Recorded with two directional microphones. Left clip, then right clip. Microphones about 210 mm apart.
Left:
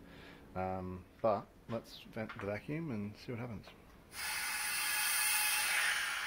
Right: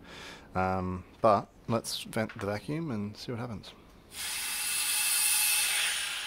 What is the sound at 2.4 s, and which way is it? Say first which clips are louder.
Speech: right 6 dB; 15° right (ahead or behind).